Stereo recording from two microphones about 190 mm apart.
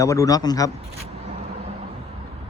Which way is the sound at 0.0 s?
15° left (ahead or behind).